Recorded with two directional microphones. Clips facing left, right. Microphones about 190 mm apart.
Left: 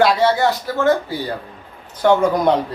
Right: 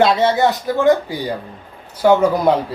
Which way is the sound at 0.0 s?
20° right (ahead or behind).